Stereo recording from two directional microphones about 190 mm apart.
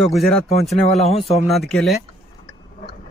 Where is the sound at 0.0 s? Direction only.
Centre (ahead or behind).